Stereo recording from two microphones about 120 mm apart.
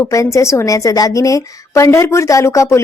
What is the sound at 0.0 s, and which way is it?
A woman's voice, 25° left (ahead or behind).